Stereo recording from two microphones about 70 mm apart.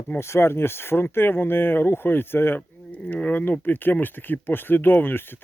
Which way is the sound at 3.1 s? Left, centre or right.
Left.